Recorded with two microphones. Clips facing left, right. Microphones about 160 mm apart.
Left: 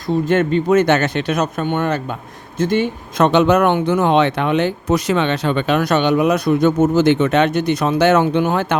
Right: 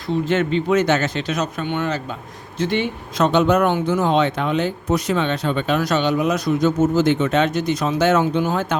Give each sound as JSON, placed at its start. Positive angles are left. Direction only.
{"t": 0.3, "sound": "speech", "side_deg": 50}
{"t": 3.2, "sound": "speech", "side_deg": 75}